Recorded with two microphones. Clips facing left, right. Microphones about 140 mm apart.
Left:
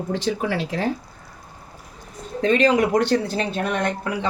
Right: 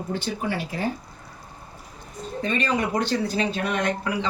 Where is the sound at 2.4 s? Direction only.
90° left.